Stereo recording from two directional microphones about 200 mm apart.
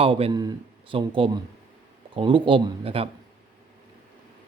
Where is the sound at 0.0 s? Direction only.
25° right (ahead or behind).